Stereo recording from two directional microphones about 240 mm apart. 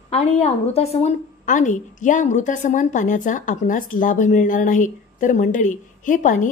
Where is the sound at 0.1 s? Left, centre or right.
Left.